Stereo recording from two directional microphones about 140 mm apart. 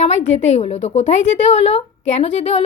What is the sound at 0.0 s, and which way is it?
A woman's voice, 55° left (ahead or behind).